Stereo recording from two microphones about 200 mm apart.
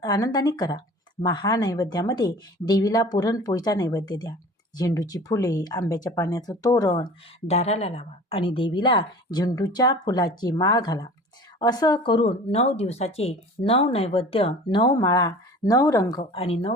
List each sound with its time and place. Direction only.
0.0 s speech: 20° left (ahead or behind)
16.3 s speech: 30° left (ahead or behind)